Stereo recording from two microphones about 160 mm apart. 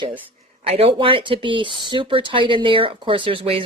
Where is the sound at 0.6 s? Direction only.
40° right (ahead or behind).